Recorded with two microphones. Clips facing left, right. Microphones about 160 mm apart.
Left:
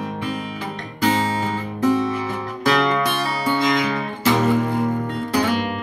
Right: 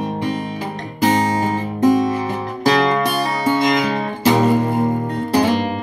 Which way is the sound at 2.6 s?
35° right (ahead or behind).